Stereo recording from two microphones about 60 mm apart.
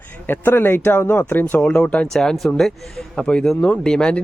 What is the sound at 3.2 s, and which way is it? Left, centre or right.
Speech, centre.